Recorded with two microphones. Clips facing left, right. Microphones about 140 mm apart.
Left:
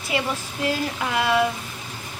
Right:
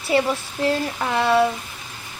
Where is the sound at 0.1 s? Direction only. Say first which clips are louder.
Right 6 dB; 35° right (ahead or behind).